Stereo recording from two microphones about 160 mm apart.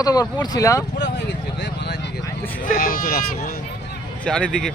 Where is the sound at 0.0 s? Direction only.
25° left (ahead or behind).